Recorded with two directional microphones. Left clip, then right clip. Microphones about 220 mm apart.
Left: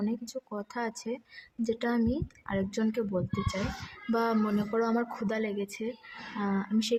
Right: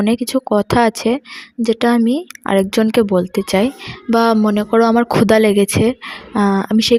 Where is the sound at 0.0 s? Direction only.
45° right (ahead or behind).